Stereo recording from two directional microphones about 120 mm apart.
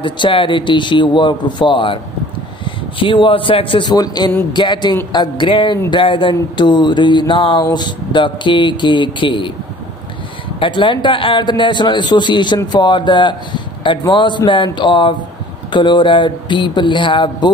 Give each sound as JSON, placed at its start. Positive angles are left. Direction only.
{"t": 0.0, "sound": "a man's voice", "side_deg": 45}
{"t": 10.6, "sound": "a man's voice", "side_deg": 40}